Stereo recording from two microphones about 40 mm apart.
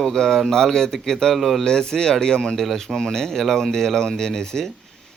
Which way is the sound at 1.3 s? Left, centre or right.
Centre.